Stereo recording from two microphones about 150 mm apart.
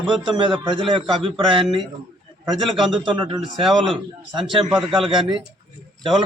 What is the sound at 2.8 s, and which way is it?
Speech, 30° right (ahead or behind).